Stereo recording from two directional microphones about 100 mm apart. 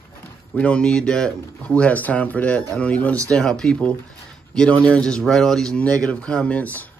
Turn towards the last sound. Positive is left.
turn(degrees=15)  # may be behind; listen again after turning